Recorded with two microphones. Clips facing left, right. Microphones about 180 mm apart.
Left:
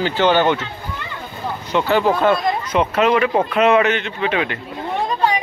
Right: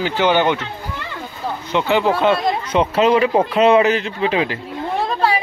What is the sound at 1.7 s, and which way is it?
Speech, 15° right (ahead or behind).